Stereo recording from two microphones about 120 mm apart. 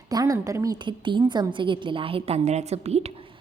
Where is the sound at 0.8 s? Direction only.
40° right (ahead or behind); by 3.1 s 60° right (ahead or behind).